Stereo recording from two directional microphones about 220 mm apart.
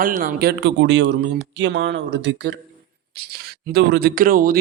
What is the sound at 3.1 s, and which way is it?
Speech, 45° right (ahead or behind).